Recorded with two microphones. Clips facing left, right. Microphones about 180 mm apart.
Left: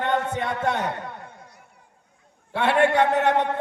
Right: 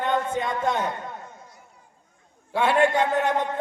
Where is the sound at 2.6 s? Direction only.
65° left (ahead or behind).